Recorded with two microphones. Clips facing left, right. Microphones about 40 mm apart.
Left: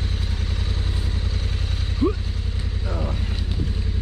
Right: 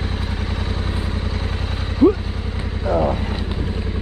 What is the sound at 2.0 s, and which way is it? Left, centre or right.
Vehicle, centre.